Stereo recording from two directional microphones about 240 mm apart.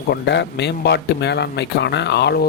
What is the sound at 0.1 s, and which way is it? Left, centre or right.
Speech, left.